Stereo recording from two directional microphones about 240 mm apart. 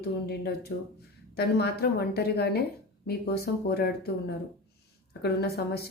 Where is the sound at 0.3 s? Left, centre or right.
Left.